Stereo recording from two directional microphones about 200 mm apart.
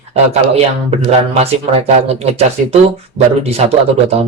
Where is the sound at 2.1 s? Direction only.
30° right (ahead or behind).